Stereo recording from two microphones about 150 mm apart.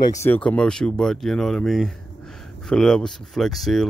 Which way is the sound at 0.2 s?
10° left (ahead or behind).